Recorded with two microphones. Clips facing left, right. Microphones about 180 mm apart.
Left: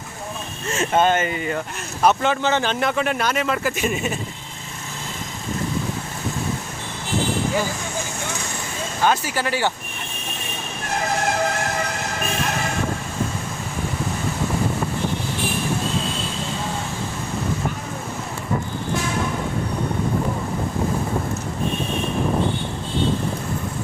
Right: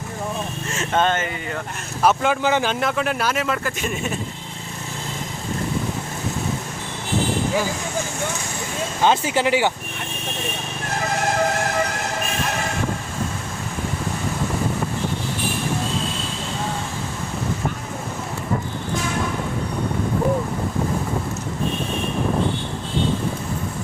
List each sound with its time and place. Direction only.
0.9 s speech: 5° left (ahead or behind)
2.0 s speech: 5° right (ahead or behind)
9.0 s speech: 20° right (ahead or behind)